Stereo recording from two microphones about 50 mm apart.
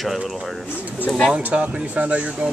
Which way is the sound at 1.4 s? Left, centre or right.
Right.